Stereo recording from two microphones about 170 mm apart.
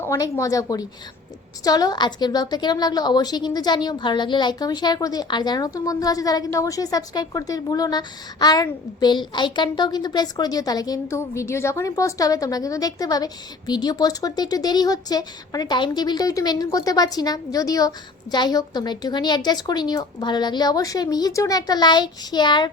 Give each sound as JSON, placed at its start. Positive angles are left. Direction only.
{"t": 0.0, "sound": "a woman's voice", "side_deg": 15}